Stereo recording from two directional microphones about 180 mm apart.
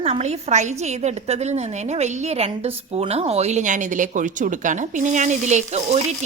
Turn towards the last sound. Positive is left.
turn(degrees=-40)  # may be behind; listen again after turning